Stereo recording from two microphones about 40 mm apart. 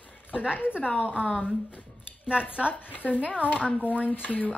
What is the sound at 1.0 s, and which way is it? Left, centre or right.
Speech, right.